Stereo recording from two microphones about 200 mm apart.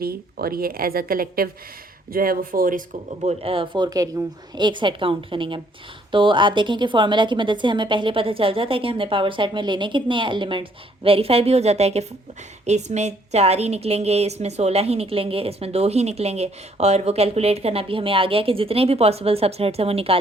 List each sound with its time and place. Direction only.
0.0 s a woman's voice: 50° right (ahead or behind); by 20.1 s 30° right (ahead or behind)